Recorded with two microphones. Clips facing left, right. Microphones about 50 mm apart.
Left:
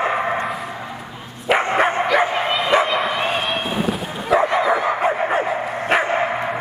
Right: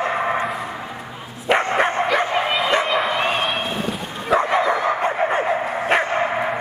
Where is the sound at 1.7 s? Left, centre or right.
Centre.